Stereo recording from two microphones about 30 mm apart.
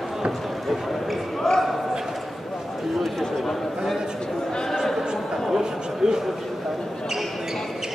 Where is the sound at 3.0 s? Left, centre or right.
Centre.